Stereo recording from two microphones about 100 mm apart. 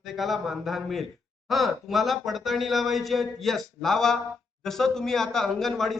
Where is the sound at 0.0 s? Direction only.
Centre (ahead or behind).